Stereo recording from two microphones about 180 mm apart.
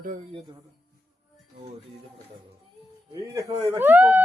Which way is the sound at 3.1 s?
15° right (ahead or behind).